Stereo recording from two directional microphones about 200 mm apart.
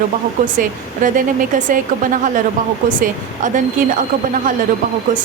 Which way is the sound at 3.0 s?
40° right (ahead or behind).